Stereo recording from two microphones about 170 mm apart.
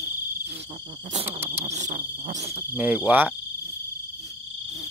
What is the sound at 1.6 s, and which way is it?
Cricket, 45° right (ahead or behind).